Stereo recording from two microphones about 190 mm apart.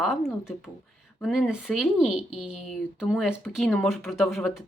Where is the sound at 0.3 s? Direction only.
5° right (ahead or behind).